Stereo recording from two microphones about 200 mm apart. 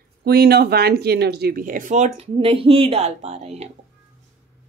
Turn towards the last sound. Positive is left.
turn(degrees=-35)  # may be behind; listen again after turning